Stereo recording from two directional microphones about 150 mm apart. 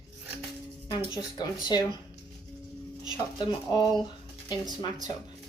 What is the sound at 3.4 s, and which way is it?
Speech, 30° left (ahead or behind).